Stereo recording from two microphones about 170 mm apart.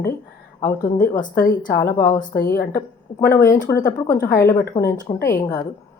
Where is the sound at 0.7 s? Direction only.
55° left (ahead or behind).